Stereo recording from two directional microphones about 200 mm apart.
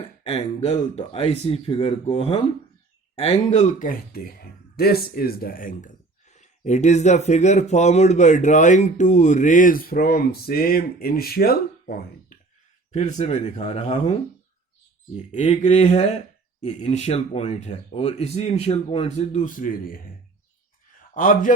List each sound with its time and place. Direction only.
0.3 s speech: 30° left (ahead or behind); by 11.9 s 50° left (ahead or behind)
12.9 s speech: 35° left (ahead or behind)
21.1 s a man's voice: 40° left (ahead or behind)